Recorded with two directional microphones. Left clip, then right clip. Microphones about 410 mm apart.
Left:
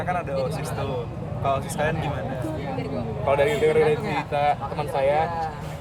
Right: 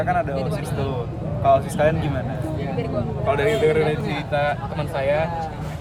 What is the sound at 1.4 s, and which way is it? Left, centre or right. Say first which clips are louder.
Speech: right 7 dB; centre.